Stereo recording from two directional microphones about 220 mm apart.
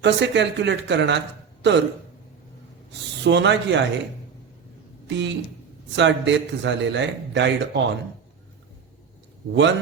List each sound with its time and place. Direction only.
0.0 s a man's voice: 55° right (ahead or behind)
3.2 s a man's voice: 55° right (ahead or behind)
5.0 s a man's voice: 55° right (ahead or behind)
9.5 s a man's voice: 55° right (ahead or behind)